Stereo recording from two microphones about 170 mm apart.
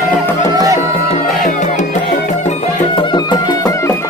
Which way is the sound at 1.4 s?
45° left (ahead or behind).